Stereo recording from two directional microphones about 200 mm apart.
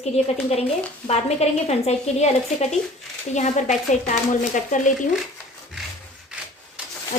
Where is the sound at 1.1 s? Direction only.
30° left (ahead or behind).